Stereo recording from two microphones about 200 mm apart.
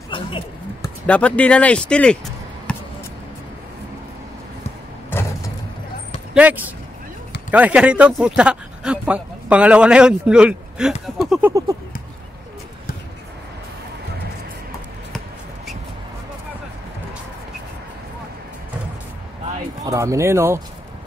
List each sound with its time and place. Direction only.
0.1 s a sound: 25° left (ahead or behind)
0.8 s speech: 5° left (ahead or behind)
2.7 s basketball bounce: 5° left (ahead or behind)
6.3 s speech: 10° right (ahead or behind)
15.1 s shuffle: centre (ahead or behind)
19.8 s speech: 15° right (ahead or behind)